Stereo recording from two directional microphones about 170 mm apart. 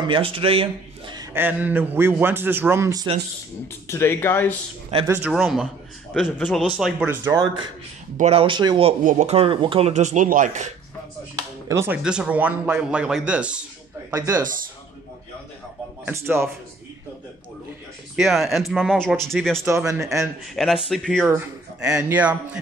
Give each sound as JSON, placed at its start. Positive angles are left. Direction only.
{"t": 0.0, "sound": "a man's voice", "side_deg": -30}
{"t": 1.3, "sound": "a man's voice", "side_deg": -10}
{"t": 3.8, "sound": "speech", "side_deg": 15}
{"t": 5.0, "sound": "a man's voice", "side_deg": -15}
{"t": 5.3, "sound": "speech", "side_deg": 0}
{"t": 7.3, "sound": "a man's voice", "side_deg": -25}
{"t": 11.7, "sound": "a man's voice", "side_deg": -15}
{"t": 14.1, "sound": "a man's voice", "side_deg": -15}
{"t": 16.1, "sound": "a man's voice", "side_deg": -15}
{"t": 18.1, "sound": "speech", "side_deg": 0}
{"t": 19.9, "sound": "a man's voice", "side_deg": -20}
{"t": 20.5, "sound": "a man's voice", "side_deg": 0}